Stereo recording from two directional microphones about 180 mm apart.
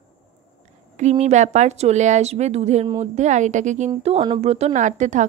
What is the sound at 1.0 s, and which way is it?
A woman's voice, 40° right (ahead or behind).